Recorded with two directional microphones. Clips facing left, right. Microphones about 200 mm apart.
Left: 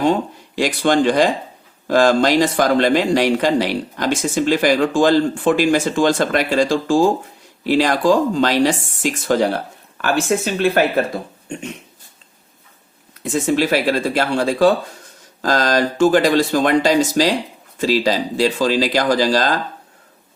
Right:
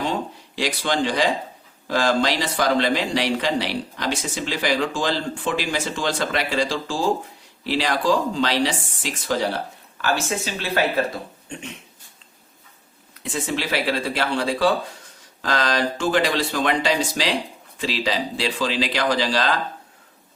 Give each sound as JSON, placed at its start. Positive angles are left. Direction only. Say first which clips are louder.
{"t": 0.5, "sound": "speech", "louder": "left 8 dB", "side_deg": 50}
{"t": 13.2, "sound": "speech", "louder": "left 9 dB", "side_deg": 45}